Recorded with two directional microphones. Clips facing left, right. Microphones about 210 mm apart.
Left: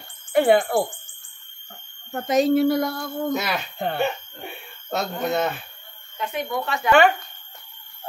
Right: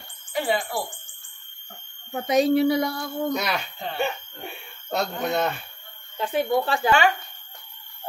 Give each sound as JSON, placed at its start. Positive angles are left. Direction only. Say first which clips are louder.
{"t": 0.3, "sound": "speech", "louder": "left 8 dB", "side_deg": 55}
{"t": 2.1, "sound": "speech", "louder": "left 1 dB", "side_deg": 0}
{"t": 3.7, "sound": "speech", "louder": "left 7 dB", "side_deg": 55}
{"t": 4.0, "sound": "speech", "louder": "left 2 dB", "side_deg": 0}
{"t": 6.1, "sound": "speech", "louder": "right 4 dB", "side_deg": -30}